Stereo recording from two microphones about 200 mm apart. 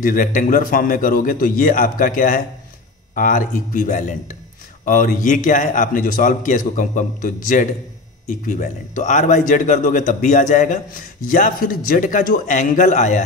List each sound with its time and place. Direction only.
0.0 s a man's voice: 40° left (ahead or behind)